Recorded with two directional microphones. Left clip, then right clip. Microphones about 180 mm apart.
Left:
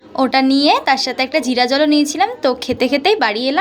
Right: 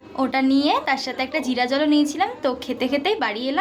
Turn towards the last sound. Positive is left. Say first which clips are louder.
# left 8 dB
turn(degrees=25)  # may be behind; listen again after turning